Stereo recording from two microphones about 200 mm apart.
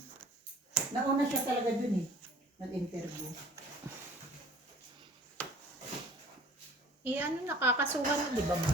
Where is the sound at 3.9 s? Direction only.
15° right (ahead or behind).